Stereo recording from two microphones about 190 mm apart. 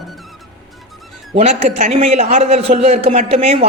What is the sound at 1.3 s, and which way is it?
A man's voice, 35° right (ahead or behind).